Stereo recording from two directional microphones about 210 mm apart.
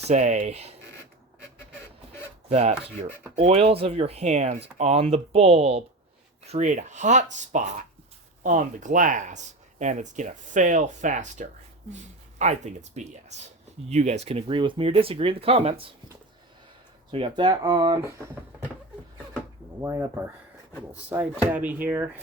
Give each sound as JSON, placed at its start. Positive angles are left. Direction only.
{"t": 0.1, "sound": "speech", "side_deg": -35}
{"t": 2.5, "sound": "speech", "side_deg": -30}
{"t": 17.1, "sound": "speech", "side_deg": -25}
{"t": 19.8, "sound": "speech", "side_deg": -15}